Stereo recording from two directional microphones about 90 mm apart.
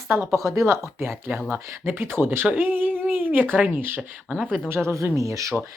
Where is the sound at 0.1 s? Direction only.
25° right (ahead or behind).